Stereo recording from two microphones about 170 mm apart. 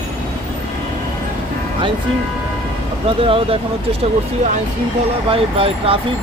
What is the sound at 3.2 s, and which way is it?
Speech, 35° right (ahead or behind).